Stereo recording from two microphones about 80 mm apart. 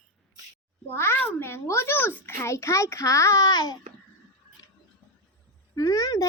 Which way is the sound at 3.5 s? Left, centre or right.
Left.